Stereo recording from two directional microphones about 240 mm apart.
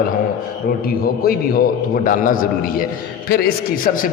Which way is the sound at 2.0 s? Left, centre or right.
Left.